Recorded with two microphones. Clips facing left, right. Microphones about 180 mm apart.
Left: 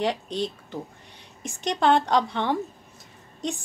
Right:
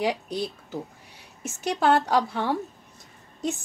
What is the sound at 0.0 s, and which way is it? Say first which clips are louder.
A woman's voice: even; 10° right (ahead or behind).